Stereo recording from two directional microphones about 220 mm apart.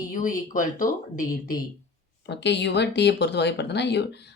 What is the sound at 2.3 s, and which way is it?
Speech, 50° left (ahead or behind).